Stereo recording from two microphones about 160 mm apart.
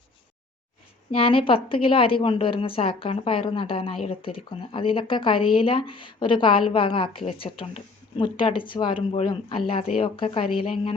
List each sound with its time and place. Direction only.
1.1 s a woman's voice: 35° left (ahead or behind)